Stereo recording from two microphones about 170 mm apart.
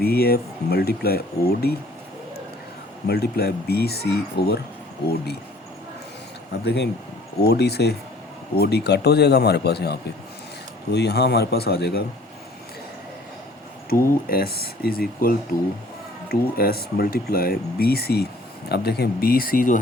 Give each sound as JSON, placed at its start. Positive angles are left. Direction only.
{"t": 0.0, "sound": "speech", "side_deg": 65}
{"t": 3.1, "sound": "speech", "side_deg": 65}
{"t": 6.5, "sound": "speech", "side_deg": 85}
{"t": 13.9, "sound": "speech", "side_deg": 60}